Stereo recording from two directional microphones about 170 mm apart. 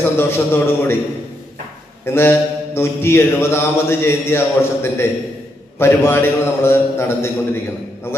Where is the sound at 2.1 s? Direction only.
15° left (ahead or behind).